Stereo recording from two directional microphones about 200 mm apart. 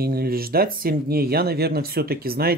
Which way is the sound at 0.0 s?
50° right (ahead or behind).